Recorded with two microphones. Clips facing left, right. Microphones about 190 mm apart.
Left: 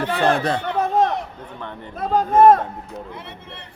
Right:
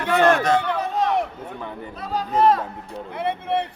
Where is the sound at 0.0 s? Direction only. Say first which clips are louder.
Right 1 dB; 30° left (ahead or behind).